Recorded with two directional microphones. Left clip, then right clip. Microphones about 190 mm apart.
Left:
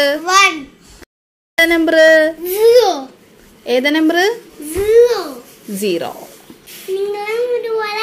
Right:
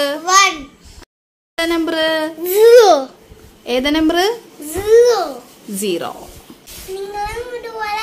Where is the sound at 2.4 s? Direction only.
55° right (ahead or behind).